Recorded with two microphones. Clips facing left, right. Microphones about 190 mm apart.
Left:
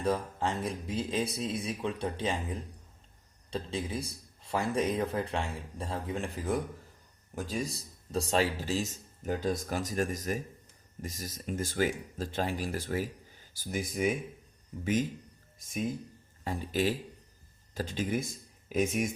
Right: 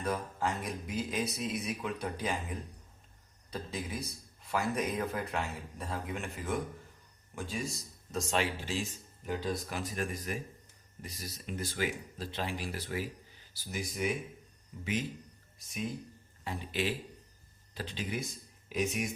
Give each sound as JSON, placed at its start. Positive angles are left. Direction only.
{"t": 0.0, "sound": "speech", "side_deg": 30}
{"t": 3.5, "sound": "speech", "side_deg": 25}
{"t": 15.5, "sound": "speech", "side_deg": 50}